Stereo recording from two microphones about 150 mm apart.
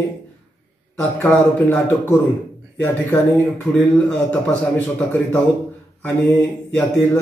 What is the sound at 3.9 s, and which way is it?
A man's voice, 10° left (ahead or behind).